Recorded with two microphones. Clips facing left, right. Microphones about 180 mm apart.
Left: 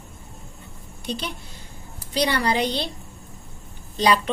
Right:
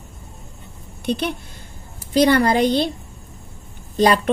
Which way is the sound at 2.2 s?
50° right (ahead or behind).